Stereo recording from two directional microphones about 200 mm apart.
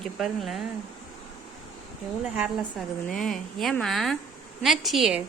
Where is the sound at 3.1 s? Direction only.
5° left (ahead or behind).